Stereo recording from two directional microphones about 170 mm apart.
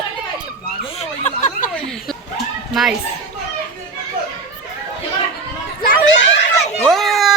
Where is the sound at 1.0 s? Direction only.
45° left (ahead or behind).